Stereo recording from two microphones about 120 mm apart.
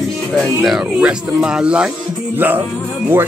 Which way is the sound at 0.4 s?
Centre (ahead or behind).